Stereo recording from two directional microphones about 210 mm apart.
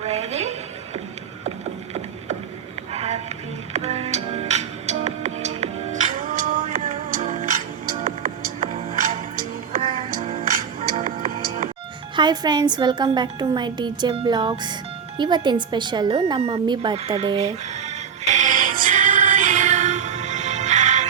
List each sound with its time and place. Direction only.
0.0 s a sound: 30° right (ahead or behind)
2.9 s music: 30° right (ahead or behind)
9.8 s music: 25° right (ahead or behind)
10.1 s music: 40° right (ahead or behind)
12.1 s a woman's voice: 20° right (ahead or behind)
15.2 s a sound: 20° right (ahead or behind)